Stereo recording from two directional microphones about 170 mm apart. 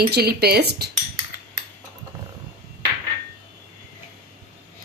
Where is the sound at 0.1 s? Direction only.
70° right (ahead or behind).